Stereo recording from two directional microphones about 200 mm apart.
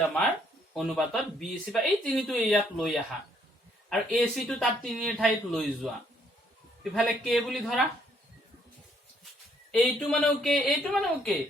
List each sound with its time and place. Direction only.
0.7 s speech: centre (ahead or behind)
6.9 s speech: centre (ahead or behind)
9.7 s speech: 5° left (ahead or behind)